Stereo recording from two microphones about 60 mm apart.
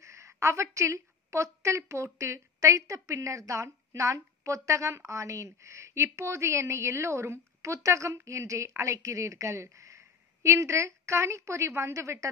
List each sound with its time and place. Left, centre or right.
0.0 s a woman's voice: right